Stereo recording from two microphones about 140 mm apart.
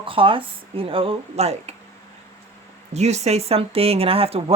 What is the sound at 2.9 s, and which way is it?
Speech, 50° right (ahead or behind).